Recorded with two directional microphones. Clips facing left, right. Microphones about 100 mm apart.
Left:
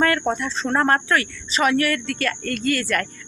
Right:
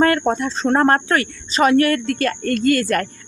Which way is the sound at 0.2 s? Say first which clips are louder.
Right 4 dB; 30° right (ahead or behind).